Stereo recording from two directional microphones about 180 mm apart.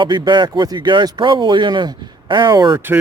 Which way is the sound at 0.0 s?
25° right (ahead or behind).